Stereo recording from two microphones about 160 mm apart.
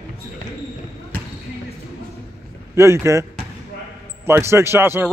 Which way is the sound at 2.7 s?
15° right (ahead or behind).